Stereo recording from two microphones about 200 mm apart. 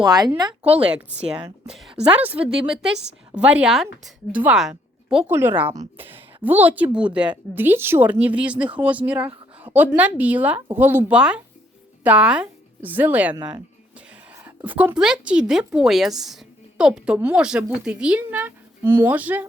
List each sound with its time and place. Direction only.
0.0 s speech: 20° right (ahead or behind)
0.7 s a woman's voice: 5° right (ahead or behind)
3.3 s a woman's voice: 5° right (ahead or behind)